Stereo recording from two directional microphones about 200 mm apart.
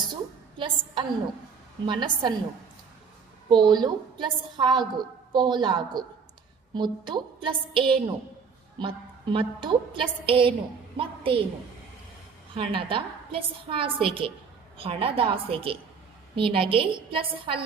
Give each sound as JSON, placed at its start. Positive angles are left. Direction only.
{"t": 0.1, "sound": "a sound", "side_deg": -25}
{"t": 1.9, "sound": "a woman's voice", "side_deg": -25}
{"t": 3.5, "sound": "a woman's voice", "side_deg": -20}
{"t": 12.5, "sound": "a woman's voice", "side_deg": -25}